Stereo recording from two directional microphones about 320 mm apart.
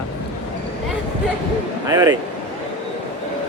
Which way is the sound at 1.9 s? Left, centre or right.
Centre.